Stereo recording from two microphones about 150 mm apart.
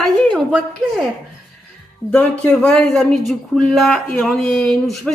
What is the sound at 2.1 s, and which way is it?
Speech, 5° left (ahead or behind).